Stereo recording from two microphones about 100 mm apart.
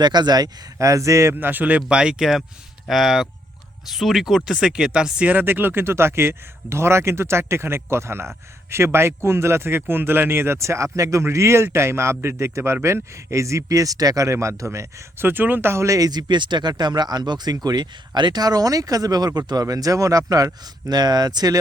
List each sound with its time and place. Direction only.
0.0 s speech: 45° right (ahead or behind)